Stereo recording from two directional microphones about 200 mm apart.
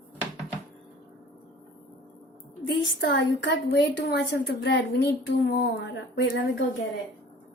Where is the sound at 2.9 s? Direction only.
60° left (ahead or behind).